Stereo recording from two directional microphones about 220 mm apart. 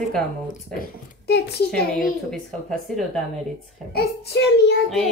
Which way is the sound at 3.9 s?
50° left (ahead or behind).